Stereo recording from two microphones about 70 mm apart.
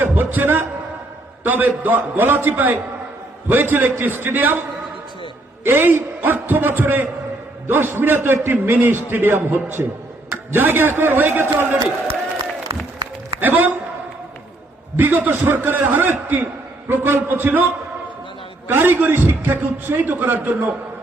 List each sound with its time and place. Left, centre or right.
0.0 s a man's voice: right
5.6 s a man's voice: right
13.4 s a man's voice: right
14.9 s a man's voice: right
18.7 s a man's voice: right